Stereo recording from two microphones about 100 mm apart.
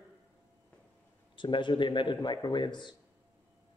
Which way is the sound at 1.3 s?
55° left (ahead or behind).